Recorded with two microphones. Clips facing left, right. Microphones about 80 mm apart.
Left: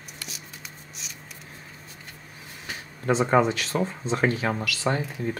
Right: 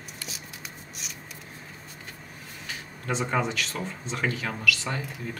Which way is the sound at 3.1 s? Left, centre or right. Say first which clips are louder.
Left 7 dB; left.